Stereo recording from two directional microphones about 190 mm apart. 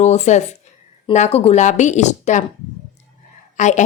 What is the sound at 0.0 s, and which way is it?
Speech, 35° left (ahead or behind).